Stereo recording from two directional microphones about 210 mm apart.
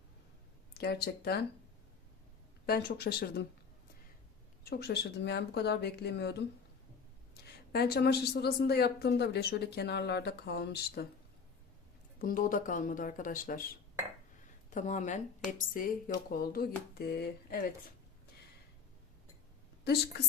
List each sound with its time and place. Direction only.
0.7 s a woman's voice: 50° left (ahead or behind)
2.6 s a woman's voice: 50° left (ahead or behind)
4.6 s a woman's voice: 50° left (ahead or behind)
7.4 s a woman's voice: 50° left (ahead or behind)
12.2 s speech: 40° left (ahead or behind)
14.7 s a woman's voice: 35° left (ahead or behind)
19.8 s a woman's voice: 50° left (ahead or behind)